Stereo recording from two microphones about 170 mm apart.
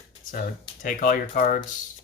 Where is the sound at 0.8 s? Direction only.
55° left (ahead or behind).